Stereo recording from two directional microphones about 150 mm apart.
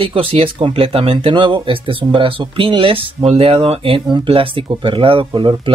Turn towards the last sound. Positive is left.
turn(degrees=-35)  # may be behind; listen again after turning